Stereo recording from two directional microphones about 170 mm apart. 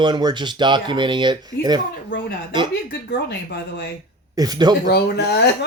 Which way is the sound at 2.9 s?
75° left (ahead or behind).